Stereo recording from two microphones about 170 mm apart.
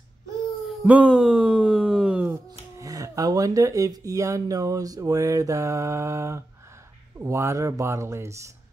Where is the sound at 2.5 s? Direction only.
20° right (ahead or behind).